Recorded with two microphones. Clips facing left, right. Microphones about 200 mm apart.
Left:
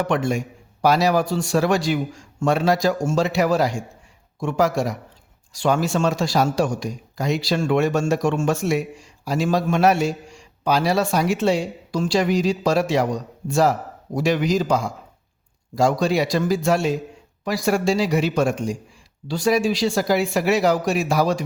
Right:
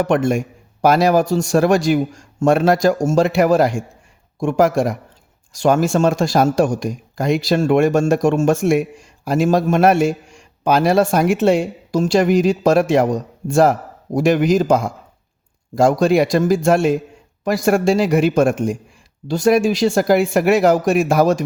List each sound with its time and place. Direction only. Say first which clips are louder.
0.0 s speech: right 5 dB; 50° right (ahead or behind)